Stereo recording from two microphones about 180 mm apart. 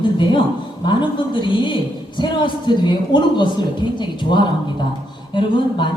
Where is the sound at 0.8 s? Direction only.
25° left (ahead or behind).